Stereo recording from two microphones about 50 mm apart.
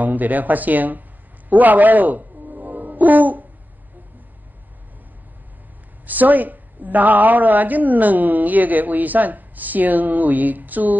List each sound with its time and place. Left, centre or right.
0.0 s a woman's voice: right
1.5 s music: right
6.0 s a woman's voice: right